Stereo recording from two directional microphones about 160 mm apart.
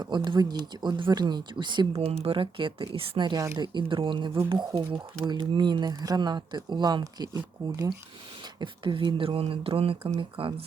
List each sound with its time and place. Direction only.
0.0 s speech: 30° right (ahead or behind)